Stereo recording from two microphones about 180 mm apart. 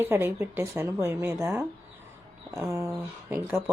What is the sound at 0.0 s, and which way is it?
Speech, 10° right (ahead or behind).